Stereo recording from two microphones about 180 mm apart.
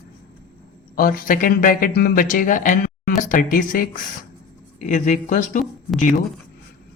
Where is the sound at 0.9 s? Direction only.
50° left (ahead or behind).